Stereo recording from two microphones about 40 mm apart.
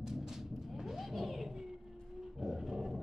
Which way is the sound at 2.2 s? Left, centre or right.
Centre.